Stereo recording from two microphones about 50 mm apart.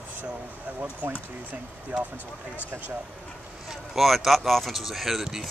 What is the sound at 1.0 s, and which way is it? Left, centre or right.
Speech, right.